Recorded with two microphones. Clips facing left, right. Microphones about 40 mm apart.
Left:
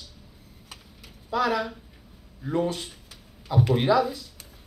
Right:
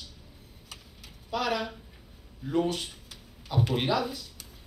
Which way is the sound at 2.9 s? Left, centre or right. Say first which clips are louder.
Even; left.